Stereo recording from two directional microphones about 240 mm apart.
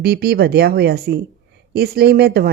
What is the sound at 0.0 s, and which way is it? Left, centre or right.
Speech, right.